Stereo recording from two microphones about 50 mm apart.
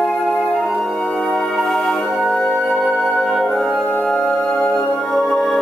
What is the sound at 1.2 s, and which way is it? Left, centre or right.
Music, centre.